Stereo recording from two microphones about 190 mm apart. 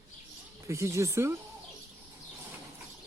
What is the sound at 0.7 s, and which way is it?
Speech, 15° right (ahead or behind).